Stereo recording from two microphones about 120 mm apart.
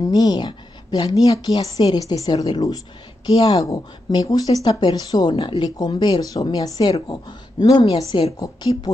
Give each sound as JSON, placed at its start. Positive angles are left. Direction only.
{"t": 0.0, "sound": "speech", "side_deg": 35}